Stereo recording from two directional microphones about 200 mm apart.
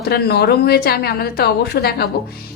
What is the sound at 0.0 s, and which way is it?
A woman's voice, 50° left (ahead or behind).